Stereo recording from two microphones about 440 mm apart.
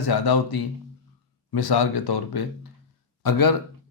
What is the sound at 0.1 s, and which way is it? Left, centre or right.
A man's voice, left.